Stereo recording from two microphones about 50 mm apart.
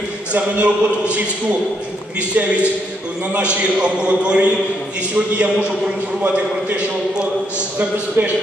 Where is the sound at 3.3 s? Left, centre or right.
Right.